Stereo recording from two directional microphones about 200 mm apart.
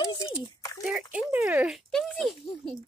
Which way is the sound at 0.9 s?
5° right (ahead or behind).